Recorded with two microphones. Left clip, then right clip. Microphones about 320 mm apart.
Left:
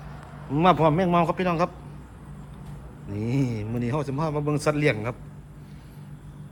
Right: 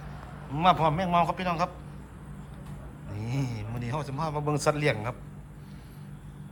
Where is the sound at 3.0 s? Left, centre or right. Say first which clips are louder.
Left 8 dB; centre.